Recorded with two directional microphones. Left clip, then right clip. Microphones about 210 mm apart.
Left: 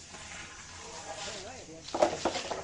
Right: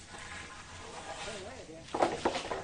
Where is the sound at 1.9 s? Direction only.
25° left (ahead or behind).